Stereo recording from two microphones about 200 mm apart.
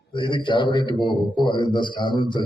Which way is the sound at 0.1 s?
25° left (ahead or behind).